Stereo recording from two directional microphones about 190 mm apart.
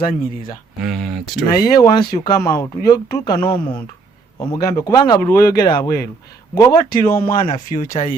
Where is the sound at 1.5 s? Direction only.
20° left (ahead or behind).